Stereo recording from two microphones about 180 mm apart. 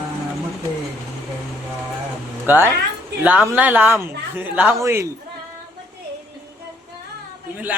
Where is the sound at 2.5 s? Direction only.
10° right (ahead or behind).